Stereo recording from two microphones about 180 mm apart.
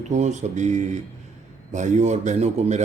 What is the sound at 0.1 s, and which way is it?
Speech, 40° right (ahead or behind).